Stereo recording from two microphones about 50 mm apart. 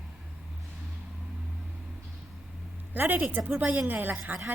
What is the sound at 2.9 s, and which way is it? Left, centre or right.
A woman's voice, right.